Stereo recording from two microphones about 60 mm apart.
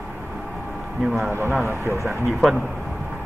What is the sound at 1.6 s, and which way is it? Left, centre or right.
Speech, right.